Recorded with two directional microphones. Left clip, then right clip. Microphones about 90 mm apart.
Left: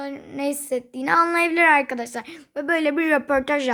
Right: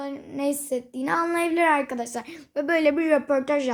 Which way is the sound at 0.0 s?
25° left (ahead or behind).